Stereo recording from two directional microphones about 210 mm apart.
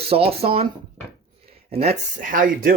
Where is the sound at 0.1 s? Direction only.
30° right (ahead or behind).